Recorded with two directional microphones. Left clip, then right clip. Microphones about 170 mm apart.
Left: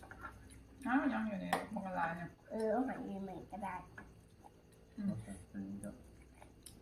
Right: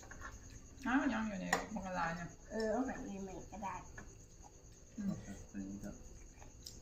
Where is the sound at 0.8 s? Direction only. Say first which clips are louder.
Even; 15° right (ahead or behind).